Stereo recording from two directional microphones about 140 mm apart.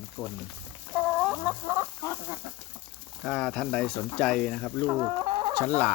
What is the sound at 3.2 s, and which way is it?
Speech, 5° left (ahead or behind).